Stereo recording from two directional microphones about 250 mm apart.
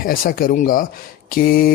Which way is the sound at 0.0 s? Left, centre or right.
Left.